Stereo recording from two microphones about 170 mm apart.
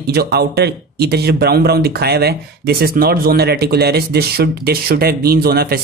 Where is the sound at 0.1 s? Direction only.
65° right (ahead or behind).